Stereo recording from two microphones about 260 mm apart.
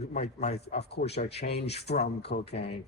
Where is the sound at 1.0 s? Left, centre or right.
Left.